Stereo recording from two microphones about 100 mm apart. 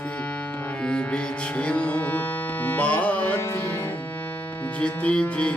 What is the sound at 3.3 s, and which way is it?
Music, 30° left (ahead or behind).